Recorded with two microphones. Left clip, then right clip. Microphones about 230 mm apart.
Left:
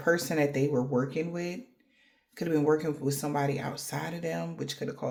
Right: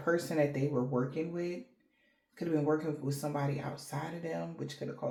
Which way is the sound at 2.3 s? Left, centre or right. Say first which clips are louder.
Left 5 dB; left.